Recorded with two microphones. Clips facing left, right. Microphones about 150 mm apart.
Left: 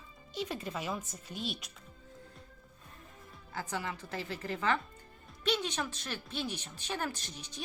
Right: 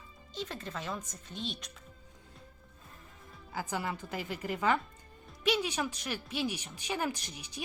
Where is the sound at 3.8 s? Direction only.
20° right (ahead or behind).